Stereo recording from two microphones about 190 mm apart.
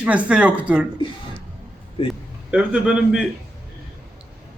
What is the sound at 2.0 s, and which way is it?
Speech, 30° left (ahead or behind).